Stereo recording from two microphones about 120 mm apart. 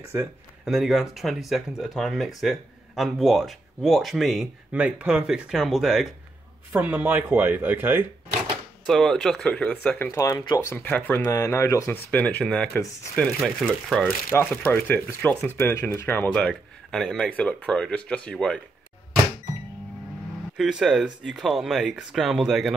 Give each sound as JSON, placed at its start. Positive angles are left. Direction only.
{"t": 0.0, "sound": "speech", "side_deg": -25}
{"t": 0.7, "sound": "speech", "side_deg": -5}
{"t": 6.7, "sound": "speech", "side_deg": -15}
{"t": 8.8, "sound": "speech", "side_deg": 5}
{"t": 10.7, "sound": "speech", "side_deg": 15}
{"t": 11.2, "sound": "speech", "side_deg": 25}
{"t": 13.4, "sound": "speech", "side_deg": 0}
{"t": 14.3, "sound": "speech", "side_deg": 15}
{"t": 17.3, "sound": "speech", "side_deg": 10}
{"t": 20.5, "sound": "speech", "side_deg": -5}